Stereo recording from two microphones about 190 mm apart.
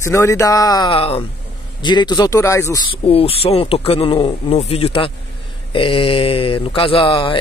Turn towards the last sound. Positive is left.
turn(degrees=25)  # may be behind; listen again after turning